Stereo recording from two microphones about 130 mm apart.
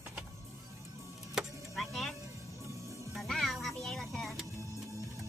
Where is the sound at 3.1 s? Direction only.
Centre (ahead or behind).